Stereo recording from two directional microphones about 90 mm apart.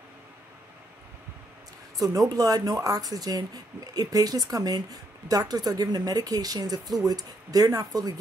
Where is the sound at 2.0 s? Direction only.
40° right (ahead or behind).